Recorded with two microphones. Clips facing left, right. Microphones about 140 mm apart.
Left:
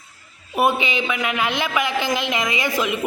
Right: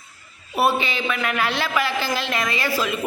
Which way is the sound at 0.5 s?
15° left (ahead or behind).